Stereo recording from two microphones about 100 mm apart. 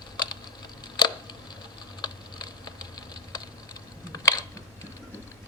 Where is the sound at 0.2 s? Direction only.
45° left (ahead or behind).